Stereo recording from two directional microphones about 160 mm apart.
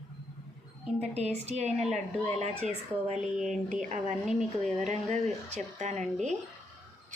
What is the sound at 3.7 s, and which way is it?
Speech, 45° right (ahead or behind).